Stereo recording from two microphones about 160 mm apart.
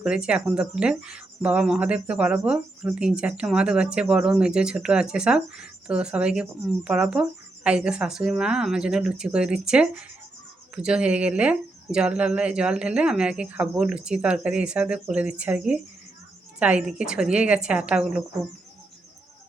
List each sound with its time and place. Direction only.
0.0 s a woman's voice: 5° right (ahead or behind)